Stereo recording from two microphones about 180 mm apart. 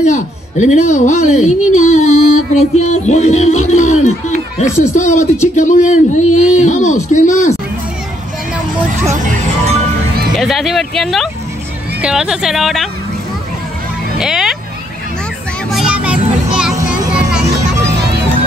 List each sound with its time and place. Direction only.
0.0 s speech: 40° left (ahead or behind)
9.1 s speech: 40° right (ahead or behind)
10.3 s speech: centre (ahead or behind)
14.1 s vehicle: 5° right (ahead or behind)
15.7 s music: 5° right (ahead or behind)